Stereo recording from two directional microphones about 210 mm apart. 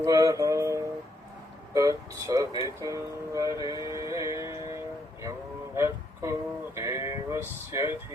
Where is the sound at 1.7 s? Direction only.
15° right (ahead or behind).